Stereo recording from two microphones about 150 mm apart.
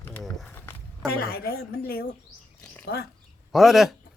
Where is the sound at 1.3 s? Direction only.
90° left.